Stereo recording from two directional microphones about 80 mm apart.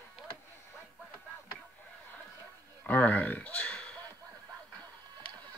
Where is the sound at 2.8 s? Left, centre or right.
Left.